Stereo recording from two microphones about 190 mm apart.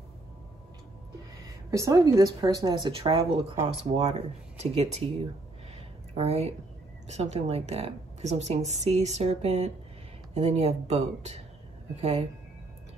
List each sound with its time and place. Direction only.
1.7 s a woman's voice: 15° right (ahead or behind); by 12.3 s 35° right (ahead or behind)